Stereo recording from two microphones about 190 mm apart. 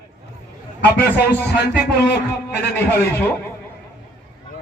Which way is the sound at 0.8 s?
60° left (ahead or behind).